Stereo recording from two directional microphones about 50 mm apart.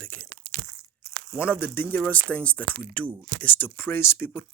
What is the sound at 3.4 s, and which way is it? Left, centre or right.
Speech, left.